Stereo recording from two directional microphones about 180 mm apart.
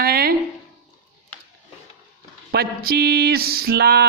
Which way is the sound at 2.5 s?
60° right (ahead or behind).